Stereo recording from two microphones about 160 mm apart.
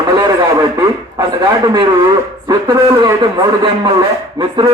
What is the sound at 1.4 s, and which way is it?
A man's voice, 25° right (ahead or behind).